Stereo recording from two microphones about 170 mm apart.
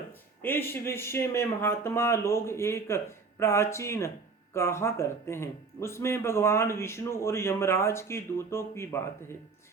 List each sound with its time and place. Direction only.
0.4 s speech: 15° left (ahead or behind)